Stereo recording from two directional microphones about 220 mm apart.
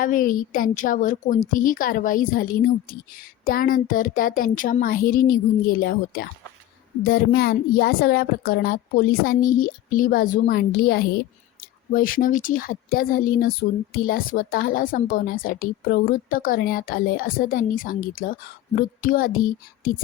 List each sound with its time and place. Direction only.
0.0 s a woman's voice: 40° left (ahead or behind)